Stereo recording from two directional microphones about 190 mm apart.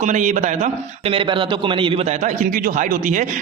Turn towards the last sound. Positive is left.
turn(degrees=-40)  # may be behind; listen again after turning